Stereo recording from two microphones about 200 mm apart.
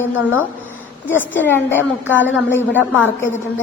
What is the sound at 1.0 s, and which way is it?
A woman's voice, 10° left (ahead or behind).